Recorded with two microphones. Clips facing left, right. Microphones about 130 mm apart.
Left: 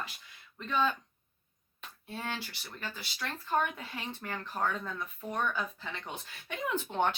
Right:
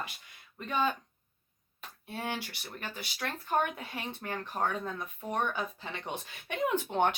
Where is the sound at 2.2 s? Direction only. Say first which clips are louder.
Right 3 dB; 15° right (ahead or behind).